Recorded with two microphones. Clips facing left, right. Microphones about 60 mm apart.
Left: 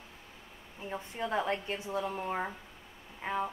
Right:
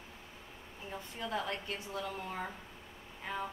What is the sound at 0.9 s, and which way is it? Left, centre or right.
A woman's voice, left.